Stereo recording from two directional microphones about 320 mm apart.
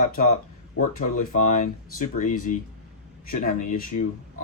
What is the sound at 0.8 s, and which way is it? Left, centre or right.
Speech, left.